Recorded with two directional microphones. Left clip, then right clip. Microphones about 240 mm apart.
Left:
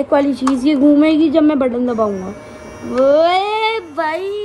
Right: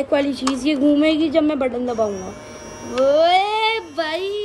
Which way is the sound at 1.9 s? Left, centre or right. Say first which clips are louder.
Left 4 dB; left.